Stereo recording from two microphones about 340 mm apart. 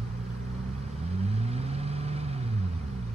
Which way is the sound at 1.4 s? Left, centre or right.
Centre.